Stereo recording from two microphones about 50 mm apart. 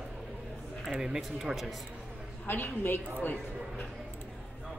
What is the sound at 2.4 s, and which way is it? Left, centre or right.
A woman's voice, left.